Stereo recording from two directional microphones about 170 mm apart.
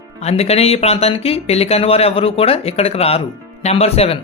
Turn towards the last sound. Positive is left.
turn(degrees=35)  # may be behind; listen again after turning